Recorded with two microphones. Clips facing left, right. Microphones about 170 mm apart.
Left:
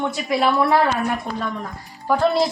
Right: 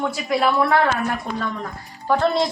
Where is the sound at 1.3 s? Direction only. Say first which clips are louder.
Even; 35° left (ahead or behind).